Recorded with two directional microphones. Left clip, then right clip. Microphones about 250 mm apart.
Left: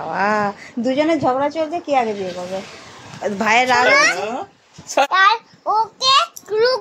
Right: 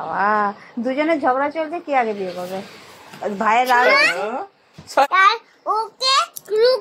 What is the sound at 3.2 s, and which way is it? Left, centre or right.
A child's voice, centre.